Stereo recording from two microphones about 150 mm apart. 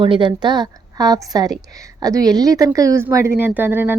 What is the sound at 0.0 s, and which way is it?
Speech, 35° right (ahead or behind).